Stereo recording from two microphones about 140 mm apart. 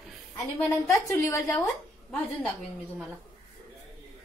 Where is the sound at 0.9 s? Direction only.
20° left (ahead or behind).